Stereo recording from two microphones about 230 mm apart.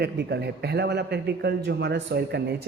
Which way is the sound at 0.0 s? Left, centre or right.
Right.